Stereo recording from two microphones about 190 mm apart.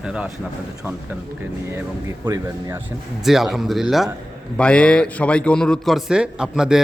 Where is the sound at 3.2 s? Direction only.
Centre (ahead or behind).